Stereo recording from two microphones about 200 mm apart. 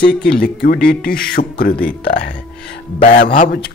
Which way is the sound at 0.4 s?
50° left (ahead or behind).